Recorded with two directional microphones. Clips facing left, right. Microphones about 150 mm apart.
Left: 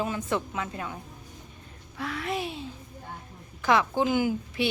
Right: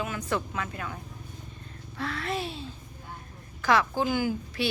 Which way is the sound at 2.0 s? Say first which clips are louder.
Left 1 dB; 10° left (ahead or behind).